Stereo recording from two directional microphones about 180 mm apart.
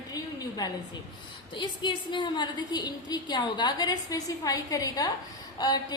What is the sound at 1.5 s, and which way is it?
A woman's voice, 25° left (ahead or behind).